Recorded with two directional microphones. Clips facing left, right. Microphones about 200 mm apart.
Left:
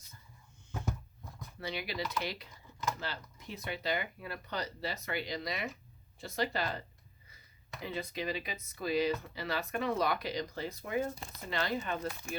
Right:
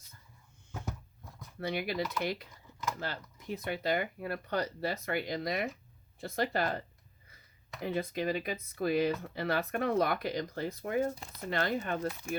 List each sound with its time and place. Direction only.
1.5 s speech: 50° right (ahead or behind)
11.1 s speech: 5° right (ahead or behind)
11.3 s speech: 50° right (ahead or behind)